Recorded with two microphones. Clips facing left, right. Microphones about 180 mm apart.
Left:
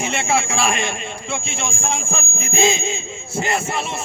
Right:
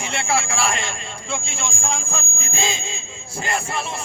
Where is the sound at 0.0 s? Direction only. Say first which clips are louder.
Left 3 dB; 20° left (ahead or behind).